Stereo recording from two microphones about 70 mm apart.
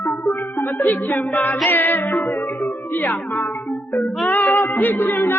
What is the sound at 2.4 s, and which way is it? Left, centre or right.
Music, left.